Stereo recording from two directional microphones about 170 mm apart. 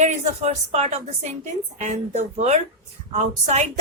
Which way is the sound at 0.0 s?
45° right (ahead or behind).